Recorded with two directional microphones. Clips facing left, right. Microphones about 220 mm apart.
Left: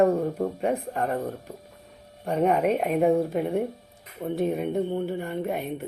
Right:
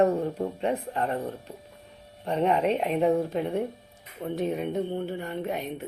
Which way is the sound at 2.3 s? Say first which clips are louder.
Left 2 dB; 10° left (ahead or behind).